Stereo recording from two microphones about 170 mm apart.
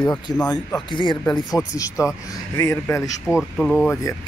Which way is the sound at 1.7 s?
20° left (ahead or behind).